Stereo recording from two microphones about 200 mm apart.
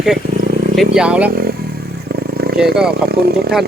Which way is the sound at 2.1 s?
50° right (ahead or behind).